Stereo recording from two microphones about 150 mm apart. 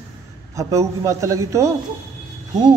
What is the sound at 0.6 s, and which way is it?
A man's voice, 20° right (ahead or behind).